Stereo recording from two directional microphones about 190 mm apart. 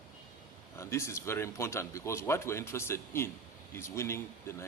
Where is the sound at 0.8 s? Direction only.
15° left (ahead or behind).